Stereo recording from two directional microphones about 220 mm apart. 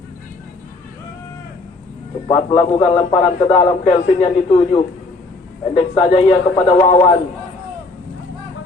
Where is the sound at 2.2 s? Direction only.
25° left (ahead or behind).